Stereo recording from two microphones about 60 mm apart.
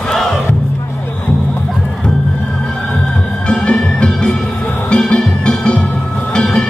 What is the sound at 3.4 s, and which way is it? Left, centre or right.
Music, centre.